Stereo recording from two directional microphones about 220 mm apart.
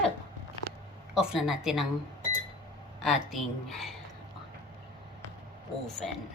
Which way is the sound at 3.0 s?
Centre (ahead or behind).